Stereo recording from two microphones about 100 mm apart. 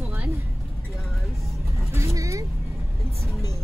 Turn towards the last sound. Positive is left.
turn(degrees=-30)  # may be behind; listen again after turning